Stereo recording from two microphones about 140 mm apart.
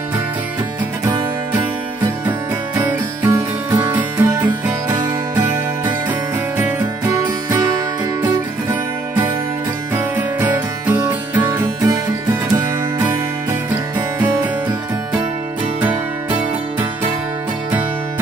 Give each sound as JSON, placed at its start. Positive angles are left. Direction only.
{"t": 2.8, "sound": "music", "side_deg": -20}
{"t": 10.1, "sound": "music", "side_deg": -15}
{"t": 13.9, "sound": "music", "side_deg": -15}